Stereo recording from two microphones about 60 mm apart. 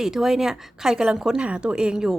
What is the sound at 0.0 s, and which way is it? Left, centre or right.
A woman's voice, centre.